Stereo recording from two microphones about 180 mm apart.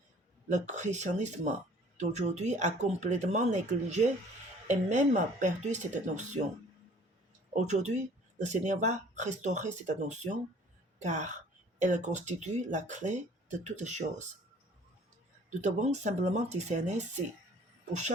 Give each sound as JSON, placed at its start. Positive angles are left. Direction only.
{"t": 0.4, "sound": "speech", "side_deg": -40}
{"t": 7.5, "sound": "speech", "side_deg": -40}
{"t": 15.4, "sound": "speech", "side_deg": -40}